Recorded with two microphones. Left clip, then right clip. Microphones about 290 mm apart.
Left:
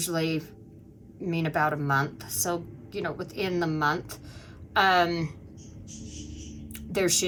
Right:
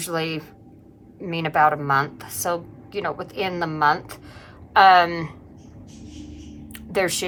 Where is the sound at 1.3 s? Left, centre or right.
Centre.